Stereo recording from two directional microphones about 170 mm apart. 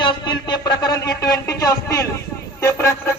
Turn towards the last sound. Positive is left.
turn(degrees=15)  # may be behind; listen again after turning